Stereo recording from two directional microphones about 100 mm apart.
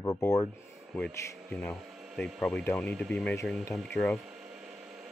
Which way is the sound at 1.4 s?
10° left (ahead or behind).